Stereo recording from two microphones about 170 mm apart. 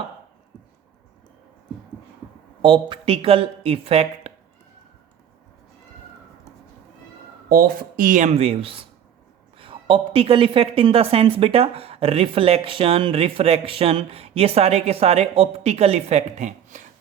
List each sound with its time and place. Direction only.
2.6 s a woman's voice: 30° right (ahead or behind)
7.5 s a woman's voice: 55° right (ahead or behind)